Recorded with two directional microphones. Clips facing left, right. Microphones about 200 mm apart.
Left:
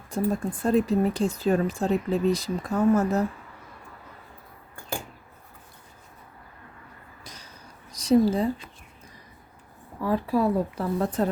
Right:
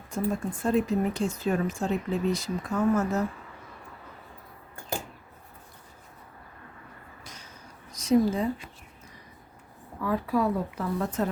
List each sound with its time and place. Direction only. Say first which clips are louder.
0.1 s speech: left 3 dB; 35° left (ahead or behind)
7.9 s speech: left 3 dB; 35° left (ahead or behind)
10.0 s speech: left 2 dB; 30° left (ahead or behind)